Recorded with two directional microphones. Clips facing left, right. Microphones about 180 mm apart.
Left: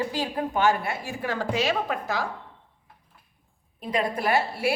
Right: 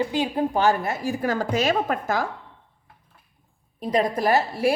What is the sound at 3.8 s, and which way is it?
Speech, 40° right (ahead or behind).